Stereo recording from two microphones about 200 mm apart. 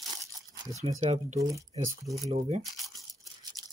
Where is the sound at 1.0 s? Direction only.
35° right (ahead or behind).